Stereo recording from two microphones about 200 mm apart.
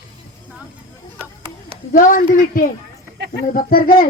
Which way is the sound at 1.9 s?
40° left (ahead or behind).